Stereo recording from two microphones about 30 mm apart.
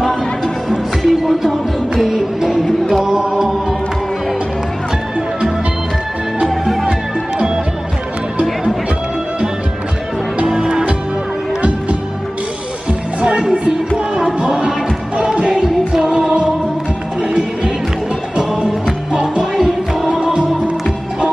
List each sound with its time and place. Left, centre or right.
0.7 s music: centre
3.1 s music: right
6.4 s music: centre
10.5 s music: right
13.2 s music: right
15.9 s music: right
19.5 s music: centre